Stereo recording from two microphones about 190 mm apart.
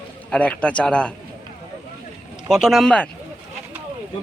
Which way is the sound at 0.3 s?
5° left (ahead or behind).